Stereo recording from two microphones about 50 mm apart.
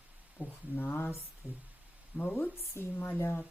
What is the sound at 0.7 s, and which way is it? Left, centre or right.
Speech, left.